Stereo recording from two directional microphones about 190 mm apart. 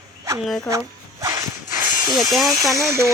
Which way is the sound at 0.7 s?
15° right (ahead or behind).